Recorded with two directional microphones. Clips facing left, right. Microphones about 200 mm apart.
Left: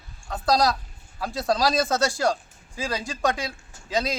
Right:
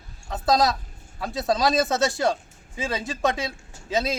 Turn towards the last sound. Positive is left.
turn(degrees=-25)  # may be behind; listen again after turning